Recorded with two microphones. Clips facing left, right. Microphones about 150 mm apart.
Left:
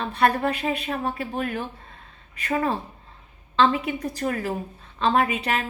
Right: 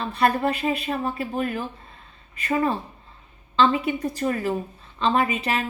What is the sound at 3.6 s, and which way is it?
Speech, centre (ahead or behind).